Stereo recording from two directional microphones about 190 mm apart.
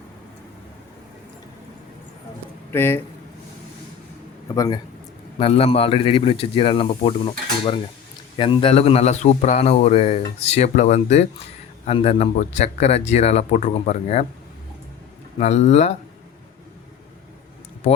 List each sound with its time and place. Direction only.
2.7 s speech: 10° left (ahead or behind)
4.5 s a man's voice: 20° left (ahead or behind)
5.4 s a man's voice: 30° left (ahead or behind)
15.4 s a man's voice: 35° left (ahead or behind)